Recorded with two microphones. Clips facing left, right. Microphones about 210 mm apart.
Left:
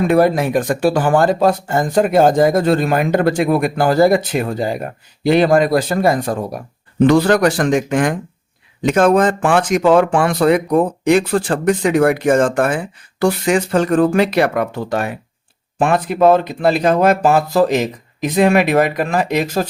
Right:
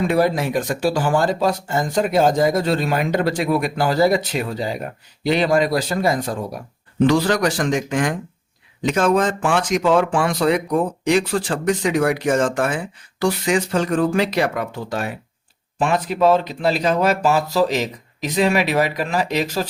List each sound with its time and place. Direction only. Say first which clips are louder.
0.0 s speech: left 5 dB; 55° left (ahead or behind)